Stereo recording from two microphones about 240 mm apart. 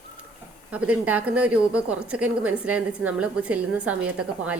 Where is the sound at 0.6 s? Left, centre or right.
Centre.